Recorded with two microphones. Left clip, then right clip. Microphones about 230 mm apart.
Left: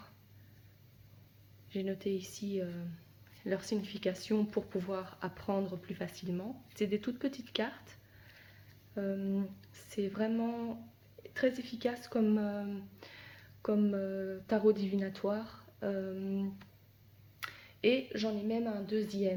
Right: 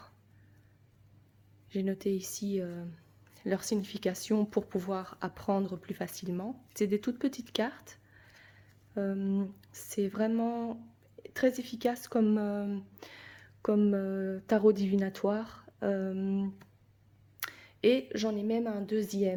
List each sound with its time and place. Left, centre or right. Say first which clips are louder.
1.7 s speech: right 3 dB; right
9.0 s speech: right 3 dB; right